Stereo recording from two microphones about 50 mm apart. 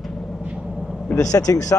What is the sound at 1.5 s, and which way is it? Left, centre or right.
Speech, left.